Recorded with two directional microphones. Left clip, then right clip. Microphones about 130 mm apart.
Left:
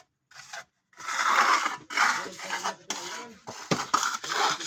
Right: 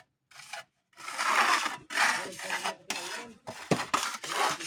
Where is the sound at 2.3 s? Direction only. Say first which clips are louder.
Left 1 dB; 20° right (ahead or behind).